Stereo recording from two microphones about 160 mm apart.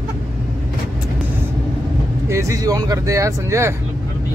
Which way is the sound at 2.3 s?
20° right (ahead or behind).